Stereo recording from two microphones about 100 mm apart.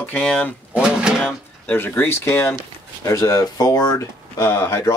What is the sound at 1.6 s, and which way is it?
Speech, 20° left (ahead or behind).